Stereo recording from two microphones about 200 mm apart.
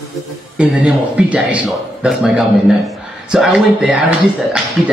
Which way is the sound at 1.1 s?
5° right (ahead or behind).